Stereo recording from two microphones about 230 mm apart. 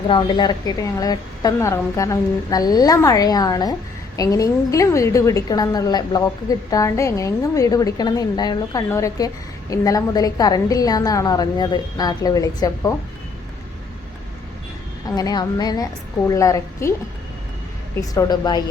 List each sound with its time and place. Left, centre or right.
0.1 s a woman's voice: centre
15.1 s a woman's voice: centre
18.1 s a woman's voice: centre